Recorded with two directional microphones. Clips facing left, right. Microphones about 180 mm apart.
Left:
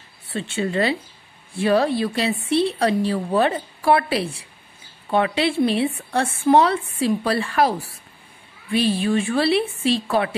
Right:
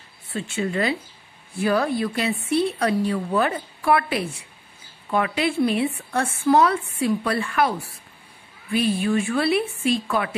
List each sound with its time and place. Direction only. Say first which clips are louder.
0.3 s a woman's voice: left 2 dB; 35° left (ahead or behind)